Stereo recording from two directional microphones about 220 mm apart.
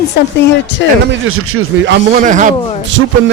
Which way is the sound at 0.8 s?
55° left (ahead or behind).